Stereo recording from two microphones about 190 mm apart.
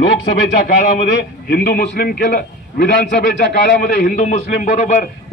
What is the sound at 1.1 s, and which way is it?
A man's voice, 55° left (ahead or behind).